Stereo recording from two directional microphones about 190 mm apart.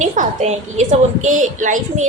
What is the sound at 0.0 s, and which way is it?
A woman's voice, 40° right (ahead or behind).